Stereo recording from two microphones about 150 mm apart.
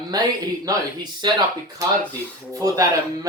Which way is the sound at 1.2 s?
30° right (ahead or behind).